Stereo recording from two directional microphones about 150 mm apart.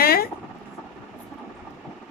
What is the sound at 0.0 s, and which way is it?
Vehicle, 90° left.